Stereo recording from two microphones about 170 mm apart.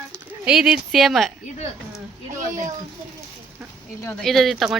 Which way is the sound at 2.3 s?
45° right (ahead or behind).